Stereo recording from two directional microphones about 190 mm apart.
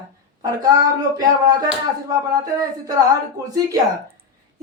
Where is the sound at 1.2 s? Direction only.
20° right (ahead or behind).